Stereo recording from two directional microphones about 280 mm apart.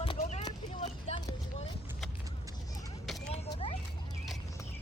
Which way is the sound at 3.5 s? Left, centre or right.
Centre.